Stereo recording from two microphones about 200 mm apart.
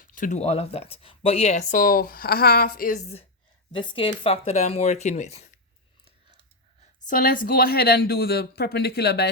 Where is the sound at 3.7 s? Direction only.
25° left (ahead or behind).